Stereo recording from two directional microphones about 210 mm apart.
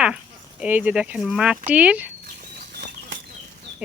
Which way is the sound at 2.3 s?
50° right (ahead or behind).